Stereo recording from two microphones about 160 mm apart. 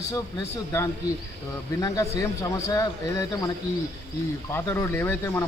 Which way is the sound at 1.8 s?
20° left (ahead or behind).